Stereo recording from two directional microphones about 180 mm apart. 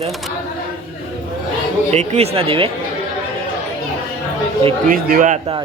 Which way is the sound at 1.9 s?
40° right (ahead or behind).